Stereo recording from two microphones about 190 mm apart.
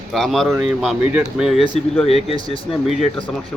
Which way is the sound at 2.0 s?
30° left (ahead or behind).